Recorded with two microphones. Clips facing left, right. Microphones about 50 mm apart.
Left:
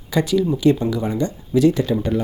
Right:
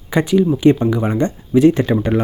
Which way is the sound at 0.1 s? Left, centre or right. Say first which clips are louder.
Right 4 dB; right.